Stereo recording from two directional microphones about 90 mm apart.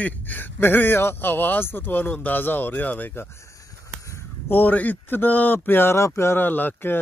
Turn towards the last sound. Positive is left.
turn(degrees=20)  # may be behind; listen again after turning